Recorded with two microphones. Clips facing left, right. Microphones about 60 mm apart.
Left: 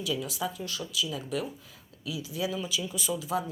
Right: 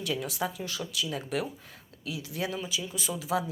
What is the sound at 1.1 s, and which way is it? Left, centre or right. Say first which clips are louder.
Speech: right 1 dB; right.